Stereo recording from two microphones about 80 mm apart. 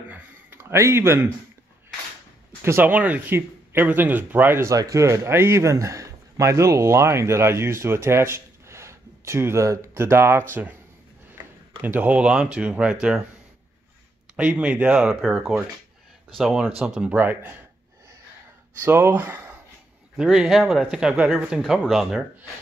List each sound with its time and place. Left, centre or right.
0.1 s a sound: right
2.6 s a man's voice: right
2.9 s speech: centre
4.6 s a man's voice: right; by 13.2 s centre
14.3 s speech: centre
17.2 s speech: right
18.8 s speech: right
20.2 s speech: centre